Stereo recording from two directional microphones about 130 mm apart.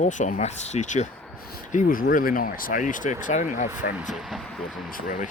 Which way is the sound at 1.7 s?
80° left.